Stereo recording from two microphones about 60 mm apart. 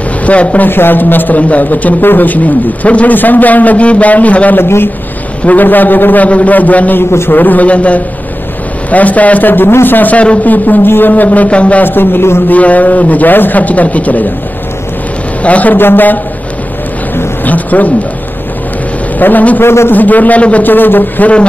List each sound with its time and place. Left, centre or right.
0.2 s a man's voice: left
0.7 s a man's voice: left
4.6 s a man's voice: left
5.4 s a man's voice: left
7.0 s a man's voice: left
7.3 s a man's voice: left
11.8 s a man's voice: left
12.4 s a man's voice: left
15.4 s a man's voice: left
17.5 s a man's voice: left
19.1 s a man's voice: left
19.6 s a man's voice: left
19.9 s a man's voice: left